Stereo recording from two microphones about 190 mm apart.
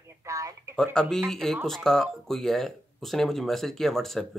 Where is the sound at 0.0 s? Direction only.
15° right (ahead or behind).